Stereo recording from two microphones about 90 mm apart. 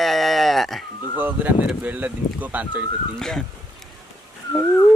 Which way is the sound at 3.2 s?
5° left (ahead or behind).